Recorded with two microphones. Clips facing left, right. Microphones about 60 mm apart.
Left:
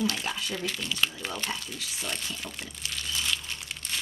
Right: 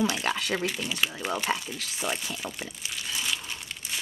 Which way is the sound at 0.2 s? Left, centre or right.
Right.